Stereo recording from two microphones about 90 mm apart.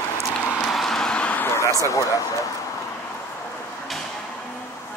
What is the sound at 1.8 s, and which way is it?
Speech, 40° left (ahead or behind).